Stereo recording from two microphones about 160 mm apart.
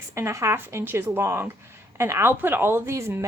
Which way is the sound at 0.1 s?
20° right (ahead or behind).